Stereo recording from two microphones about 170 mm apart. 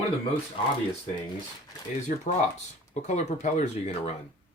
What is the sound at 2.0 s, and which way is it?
Speech, 50° left (ahead or behind).